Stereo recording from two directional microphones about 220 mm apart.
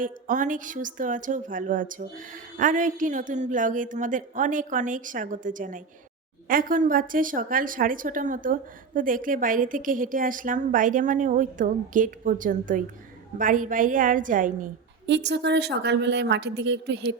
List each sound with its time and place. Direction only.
0.0 s a woman's voice: 35° right (ahead or behind)
15.0 s a woman's voice: 50° right (ahead or behind)